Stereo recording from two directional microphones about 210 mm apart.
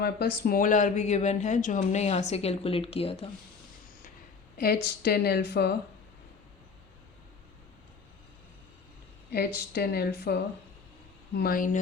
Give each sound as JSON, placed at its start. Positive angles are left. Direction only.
{"t": 0.0, "sound": "speech", "side_deg": 50}
{"t": 4.5, "sound": "speech", "side_deg": 50}
{"t": 9.3, "sound": "speech", "side_deg": 50}
{"t": 11.3, "sound": "speech", "side_deg": 45}